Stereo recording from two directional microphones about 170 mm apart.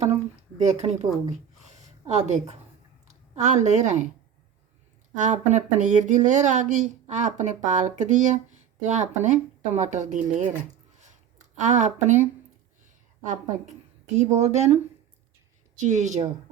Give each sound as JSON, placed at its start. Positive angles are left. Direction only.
{"t": 0.6, "sound": "speech", "side_deg": -40}
{"t": 1.3, "sound": "a sound", "side_deg": -40}
{"t": 3.1, "sound": "a woman's voice", "side_deg": -45}
{"t": 5.1, "sound": "speech", "side_deg": -45}
{"t": 11.0, "sound": "a sound", "side_deg": -45}
{"t": 13.2, "sound": "speech", "side_deg": -45}
{"t": 15.9, "sound": "speech", "side_deg": -45}